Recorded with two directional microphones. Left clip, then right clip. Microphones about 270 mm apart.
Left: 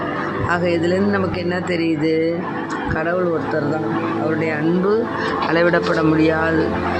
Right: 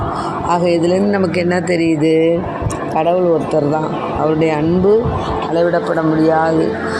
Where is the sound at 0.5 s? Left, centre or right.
Centre.